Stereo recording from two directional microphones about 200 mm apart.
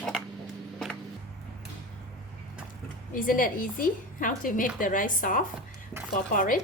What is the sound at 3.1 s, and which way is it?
A woman's voice, 45° left (ahead or behind).